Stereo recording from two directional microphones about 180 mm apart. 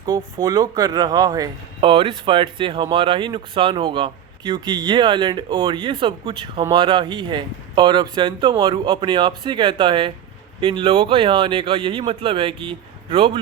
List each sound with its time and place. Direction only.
0.3 s speech: 25° right (ahead or behind)